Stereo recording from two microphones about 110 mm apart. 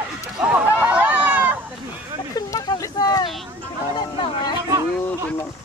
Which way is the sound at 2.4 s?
35° left (ahead or behind).